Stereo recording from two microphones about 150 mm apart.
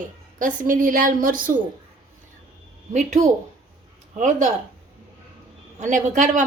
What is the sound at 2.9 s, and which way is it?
A woman's voice, 50° right (ahead or behind).